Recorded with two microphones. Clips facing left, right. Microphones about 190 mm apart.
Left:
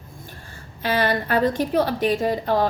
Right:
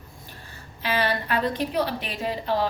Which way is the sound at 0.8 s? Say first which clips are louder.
Left 4 dB; 45° left (ahead or behind).